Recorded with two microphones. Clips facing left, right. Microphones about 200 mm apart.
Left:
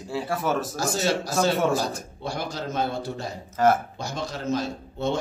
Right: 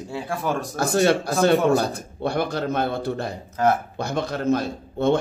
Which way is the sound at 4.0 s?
60° right (ahead or behind).